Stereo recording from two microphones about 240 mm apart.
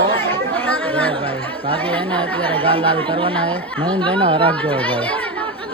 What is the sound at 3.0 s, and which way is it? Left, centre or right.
Speech, right.